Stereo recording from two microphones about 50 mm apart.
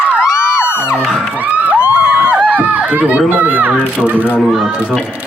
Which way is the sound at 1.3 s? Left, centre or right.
Right.